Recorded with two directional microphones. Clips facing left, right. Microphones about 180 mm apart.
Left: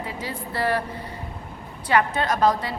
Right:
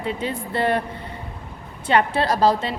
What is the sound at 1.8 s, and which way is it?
Speech, 30° right (ahead or behind).